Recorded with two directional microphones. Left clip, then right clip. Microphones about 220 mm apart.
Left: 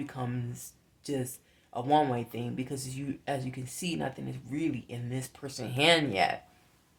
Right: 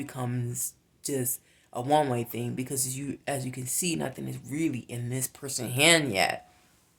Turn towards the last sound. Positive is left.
turn(degrees=-35)  # may be behind; listen again after turning